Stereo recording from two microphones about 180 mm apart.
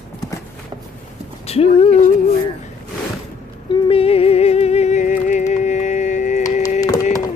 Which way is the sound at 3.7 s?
30° left (ahead or behind).